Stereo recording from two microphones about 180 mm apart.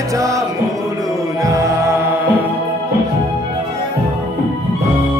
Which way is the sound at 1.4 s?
15° right (ahead or behind).